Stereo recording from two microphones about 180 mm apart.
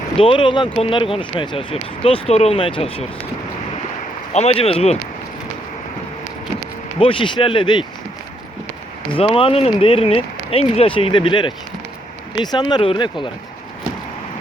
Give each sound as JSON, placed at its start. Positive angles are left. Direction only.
{"t": 0.2, "sound": "speech", "side_deg": 30}
{"t": 4.3, "sound": "a man's voice", "side_deg": 35}
{"t": 7.0, "sound": "speech", "side_deg": 30}
{"t": 9.1, "sound": "speech", "side_deg": 30}